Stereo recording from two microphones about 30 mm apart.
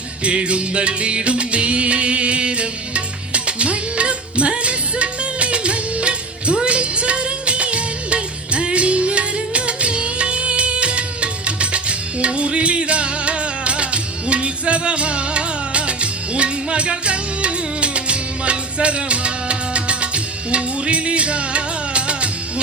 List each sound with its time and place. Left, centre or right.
0.3 s music: right